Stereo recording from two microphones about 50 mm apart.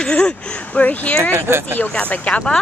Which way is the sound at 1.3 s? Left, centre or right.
Right.